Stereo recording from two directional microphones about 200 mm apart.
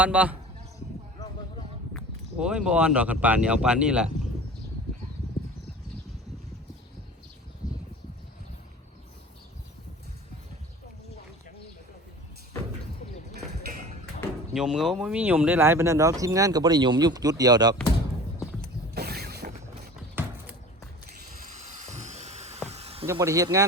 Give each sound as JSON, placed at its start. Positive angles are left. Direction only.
{"t": 0.0, "sound": "speech", "side_deg": -5}
{"t": 1.9, "sound": "speech", "side_deg": 0}
{"t": 14.5, "sound": "speech", "side_deg": -5}
{"t": 18.6, "sound": "mechanisms", "side_deg": -50}
{"t": 21.6, "sound": "dental drill", "side_deg": -35}
{"t": 22.7, "sound": "a sound", "side_deg": -30}
{"t": 23.1, "sound": "speech", "side_deg": -15}